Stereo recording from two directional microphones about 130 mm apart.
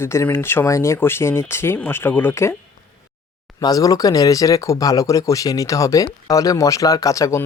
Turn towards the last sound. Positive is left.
turn(degrees=25)  # may be behind; listen again after turning